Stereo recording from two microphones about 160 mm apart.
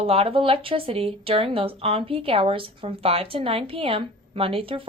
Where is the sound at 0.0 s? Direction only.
35° right (ahead or behind).